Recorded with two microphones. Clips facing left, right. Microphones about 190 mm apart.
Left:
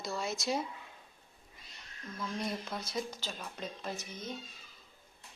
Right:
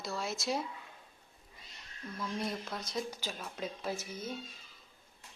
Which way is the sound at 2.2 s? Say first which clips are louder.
Even; 5° right (ahead or behind).